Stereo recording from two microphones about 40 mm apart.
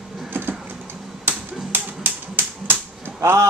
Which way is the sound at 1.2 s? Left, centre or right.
Right.